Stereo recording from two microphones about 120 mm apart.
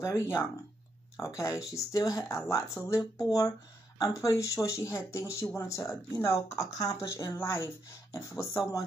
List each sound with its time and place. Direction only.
0.0 s speech: 25° left (ahead or behind)